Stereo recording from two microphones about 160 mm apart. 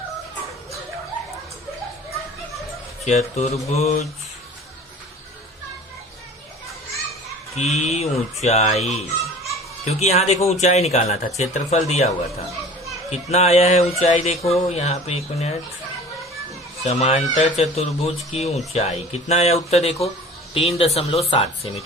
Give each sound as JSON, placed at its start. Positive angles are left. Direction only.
{"t": 3.0, "sound": "speech", "side_deg": 45}
{"t": 7.5, "sound": "speech", "side_deg": 45}
{"t": 16.8, "sound": "speech", "side_deg": 40}